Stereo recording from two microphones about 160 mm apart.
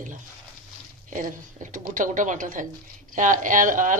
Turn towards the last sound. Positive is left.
turn(degrees=-55)  # may be behind; listen again after turning